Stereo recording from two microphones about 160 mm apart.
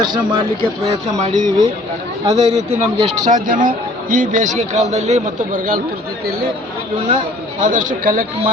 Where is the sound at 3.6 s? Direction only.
55° right (ahead or behind).